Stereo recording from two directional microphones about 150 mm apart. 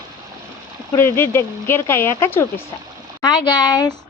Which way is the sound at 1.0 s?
15° left (ahead or behind).